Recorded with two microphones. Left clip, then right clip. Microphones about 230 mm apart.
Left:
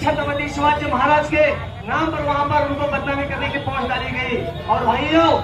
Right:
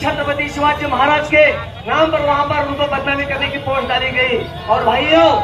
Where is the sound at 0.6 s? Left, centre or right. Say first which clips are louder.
Right 2 dB; right.